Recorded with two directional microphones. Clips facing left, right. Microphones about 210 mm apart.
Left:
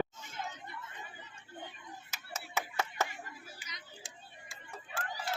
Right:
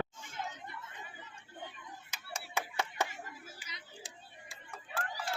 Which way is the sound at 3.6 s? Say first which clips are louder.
Right 1 dB; 30° right (ahead or behind).